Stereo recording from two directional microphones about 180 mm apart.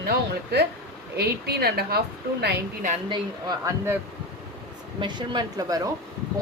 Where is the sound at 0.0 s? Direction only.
60° right (ahead or behind).